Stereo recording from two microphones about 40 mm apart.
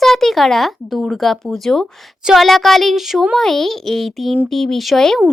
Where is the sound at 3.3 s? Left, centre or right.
Centre.